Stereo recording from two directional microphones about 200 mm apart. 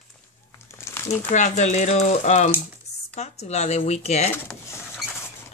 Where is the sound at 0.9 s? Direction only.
15° left (ahead or behind).